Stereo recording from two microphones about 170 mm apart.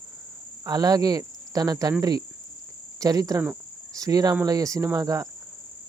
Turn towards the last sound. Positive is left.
turn(degrees=-20)  # may be behind; listen again after turning